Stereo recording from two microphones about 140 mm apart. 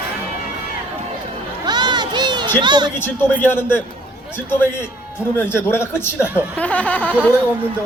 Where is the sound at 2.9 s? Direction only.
15° left (ahead or behind).